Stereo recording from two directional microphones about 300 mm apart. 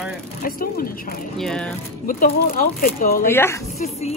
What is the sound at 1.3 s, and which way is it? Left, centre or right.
Speech, centre.